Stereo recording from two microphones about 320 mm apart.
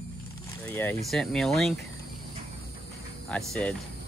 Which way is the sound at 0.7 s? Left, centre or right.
Centre.